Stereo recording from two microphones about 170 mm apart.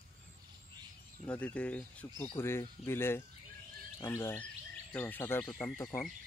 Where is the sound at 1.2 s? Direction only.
10° left (ahead or behind).